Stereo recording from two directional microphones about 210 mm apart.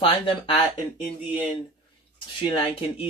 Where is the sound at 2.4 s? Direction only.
25° left (ahead or behind).